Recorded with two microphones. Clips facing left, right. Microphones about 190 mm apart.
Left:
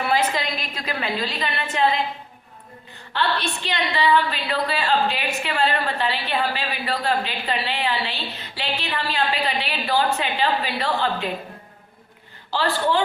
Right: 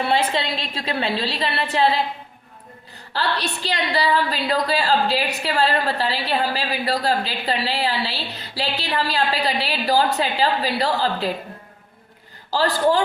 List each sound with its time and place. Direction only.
0.0 s a woman's voice: 30° right (ahead or behind)
3.1 s a woman's voice: 40° right (ahead or behind)
12.5 s a woman's voice: 40° right (ahead or behind)